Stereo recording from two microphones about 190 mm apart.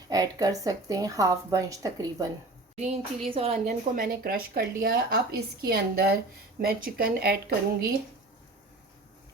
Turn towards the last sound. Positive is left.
turn(degrees=-55)  # may be behind; listen again after turning